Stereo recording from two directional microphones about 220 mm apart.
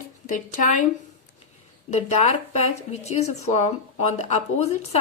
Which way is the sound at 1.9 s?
30° left (ahead or behind).